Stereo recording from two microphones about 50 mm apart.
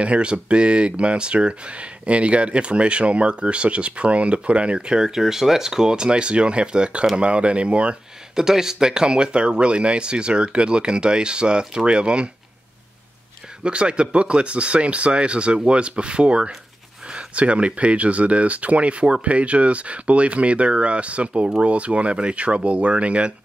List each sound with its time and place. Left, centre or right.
0.0 s speech: right
8.4 s speech: centre
13.7 s speech: right